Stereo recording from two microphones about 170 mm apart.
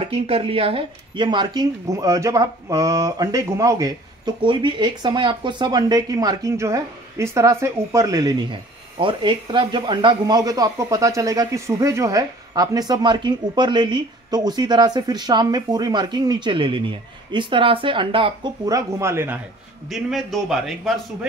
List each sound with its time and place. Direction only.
0.0 s speech: 35° right (ahead or behind); by 3.9 s 20° right (ahead or behind)
4.4 s speech: 30° right (ahead or behind); by 19.4 s 15° right (ahead or behind)
19.9 s a man's voice: centre (ahead or behind)